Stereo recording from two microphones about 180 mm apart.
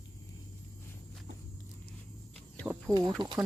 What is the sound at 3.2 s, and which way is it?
Speech, 25° right (ahead or behind).